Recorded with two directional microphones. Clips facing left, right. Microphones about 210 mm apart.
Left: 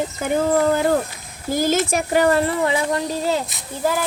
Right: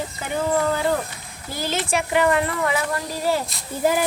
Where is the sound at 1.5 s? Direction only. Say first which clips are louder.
Left 6 dB; 45° left (ahead or behind); by 3.4 s 25° left (ahead or behind).